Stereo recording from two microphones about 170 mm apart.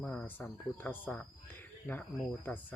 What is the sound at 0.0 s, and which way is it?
Speech, 5° left (ahead or behind).